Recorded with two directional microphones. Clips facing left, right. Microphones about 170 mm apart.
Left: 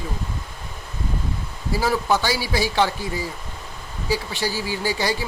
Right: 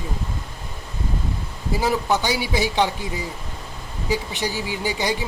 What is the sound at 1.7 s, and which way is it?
Speech, 20° right (ahead or behind).